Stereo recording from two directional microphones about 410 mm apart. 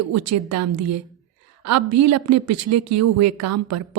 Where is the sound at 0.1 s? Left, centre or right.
Right.